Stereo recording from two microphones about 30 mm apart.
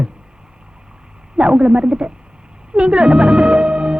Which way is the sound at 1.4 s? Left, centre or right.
Right.